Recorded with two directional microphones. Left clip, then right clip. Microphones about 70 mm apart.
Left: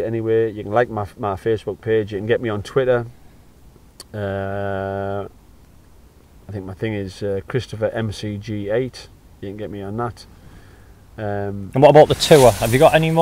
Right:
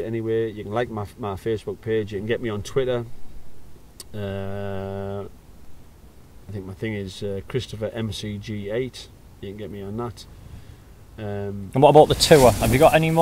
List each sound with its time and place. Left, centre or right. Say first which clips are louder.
0.0 s speech: left 6 dB; left
4.1 s speech: left 7 dB; left
6.5 s speech: left 5 dB; left
11.1 s speech: left 6 dB; left
11.7 s speech: left 3 dB; centre